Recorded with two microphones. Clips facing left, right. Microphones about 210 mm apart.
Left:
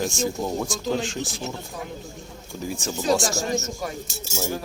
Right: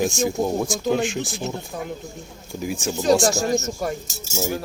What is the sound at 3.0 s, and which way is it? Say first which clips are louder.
Speech: right 5 dB; 40° right (ahead or behind).